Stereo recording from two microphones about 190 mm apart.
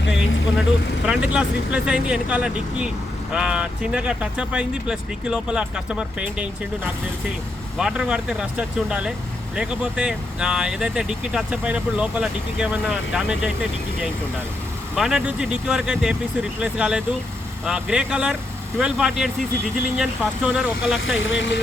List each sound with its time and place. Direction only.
1.0 s speech: 5° right (ahead or behind)
21.2 s speech: 80° left